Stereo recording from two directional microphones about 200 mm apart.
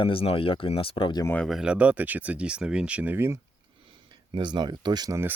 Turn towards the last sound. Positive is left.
turn(degrees=-15)  # may be behind; listen again after turning